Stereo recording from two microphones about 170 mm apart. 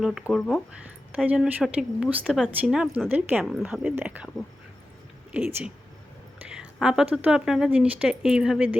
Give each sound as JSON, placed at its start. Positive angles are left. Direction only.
{"t": 0.0, "sound": "a woman's voice", "side_deg": -5}
{"t": 5.3, "sound": "a woman's voice", "side_deg": -10}